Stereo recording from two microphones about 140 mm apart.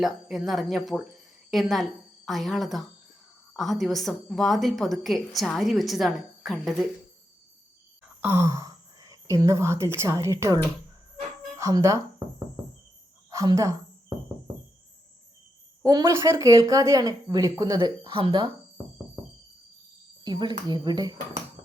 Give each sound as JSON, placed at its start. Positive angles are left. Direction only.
{"t": 0.0, "sound": "a woman's voice", "side_deg": 0}
{"t": 8.2, "sound": "speech", "side_deg": -20}
{"t": 13.3, "sound": "speech", "side_deg": -25}
{"t": 15.8, "sound": "speech", "side_deg": -25}
{"t": 20.2, "sound": "speech", "side_deg": -30}